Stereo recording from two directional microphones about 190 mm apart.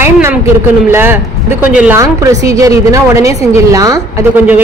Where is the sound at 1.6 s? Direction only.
5° right (ahead or behind).